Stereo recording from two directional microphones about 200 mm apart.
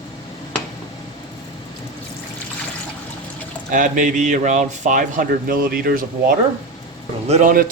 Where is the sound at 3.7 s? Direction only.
40° right (ahead or behind).